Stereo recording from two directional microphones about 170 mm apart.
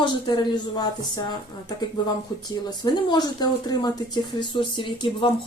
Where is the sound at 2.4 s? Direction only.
25° left (ahead or behind).